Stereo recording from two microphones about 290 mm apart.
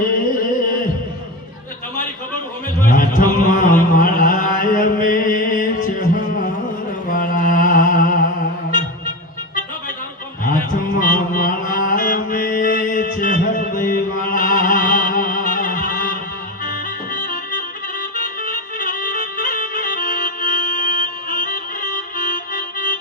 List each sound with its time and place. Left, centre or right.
2.8 s a sound: left
7.1 s music: left
10.4 s mantra: left
16.6 s music: left